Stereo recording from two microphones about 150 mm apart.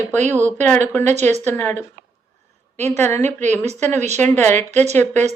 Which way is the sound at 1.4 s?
15° left (ahead or behind).